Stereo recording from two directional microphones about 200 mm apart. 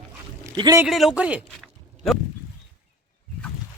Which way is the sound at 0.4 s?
20° right (ahead or behind).